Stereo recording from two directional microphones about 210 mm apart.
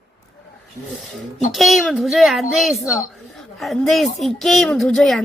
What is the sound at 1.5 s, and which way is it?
Speech, centre (ahead or behind).